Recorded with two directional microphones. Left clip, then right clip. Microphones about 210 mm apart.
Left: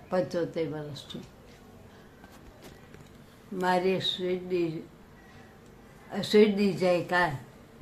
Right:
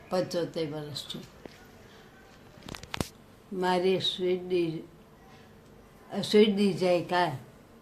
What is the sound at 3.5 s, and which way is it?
Speech, 15° right (ahead or behind).